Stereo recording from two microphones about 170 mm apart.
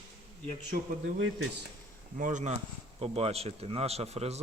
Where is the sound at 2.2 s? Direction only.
45° right (ahead or behind).